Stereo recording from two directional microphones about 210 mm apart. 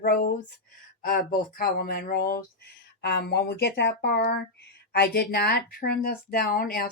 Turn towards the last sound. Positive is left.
turn(degrees=45)  # may be behind; listen again after turning